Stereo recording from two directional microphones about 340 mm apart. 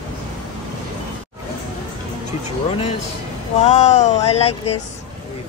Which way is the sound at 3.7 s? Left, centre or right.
Centre.